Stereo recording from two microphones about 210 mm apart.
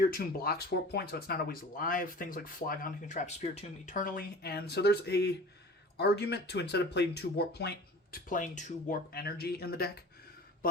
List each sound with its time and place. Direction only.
0.1 s speech: 45° left (ahead or behind)